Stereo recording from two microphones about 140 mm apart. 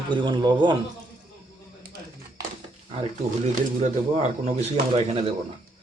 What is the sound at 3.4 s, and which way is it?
Speech, 55° right (ahead or behind).